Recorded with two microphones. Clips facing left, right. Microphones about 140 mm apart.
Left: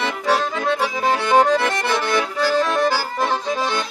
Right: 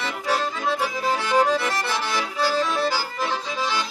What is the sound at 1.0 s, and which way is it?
Accordion, 70° left (ahead or behind).